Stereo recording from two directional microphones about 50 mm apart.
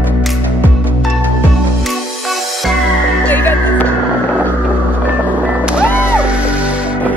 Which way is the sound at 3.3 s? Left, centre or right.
Left.